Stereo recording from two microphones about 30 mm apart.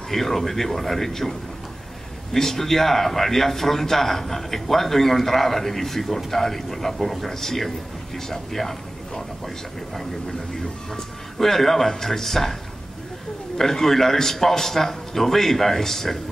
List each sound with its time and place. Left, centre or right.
0.1 s a man's voice: centre
2.3 s a man's voice: centre
10.9 s a man's voice: centre
13.6 s a man's voice: centre